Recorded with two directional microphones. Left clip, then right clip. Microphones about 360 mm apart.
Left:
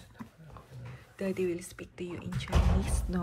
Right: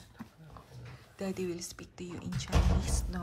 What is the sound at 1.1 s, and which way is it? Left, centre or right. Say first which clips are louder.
Speech: left 5 dB; centre.